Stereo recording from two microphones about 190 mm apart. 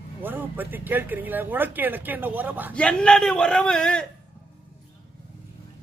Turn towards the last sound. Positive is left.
turn(degrees=5)  # may be behind; listen again after turning